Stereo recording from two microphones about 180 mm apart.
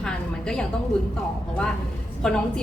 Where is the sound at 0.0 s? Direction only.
5° left (ahead or behind).